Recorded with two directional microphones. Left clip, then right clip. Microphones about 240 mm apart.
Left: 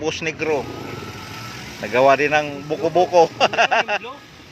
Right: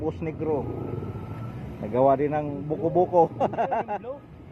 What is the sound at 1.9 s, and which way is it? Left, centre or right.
Speech, left.